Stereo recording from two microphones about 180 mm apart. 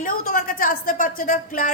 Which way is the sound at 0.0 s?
50° left (ahead or behind).